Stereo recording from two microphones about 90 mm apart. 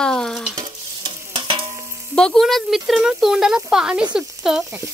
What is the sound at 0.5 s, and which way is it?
Stir, 55° right (ahead or behind).